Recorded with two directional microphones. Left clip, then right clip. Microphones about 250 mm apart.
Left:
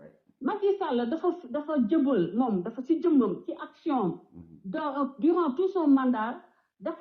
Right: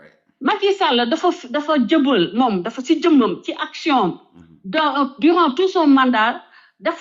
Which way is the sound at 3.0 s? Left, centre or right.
Right.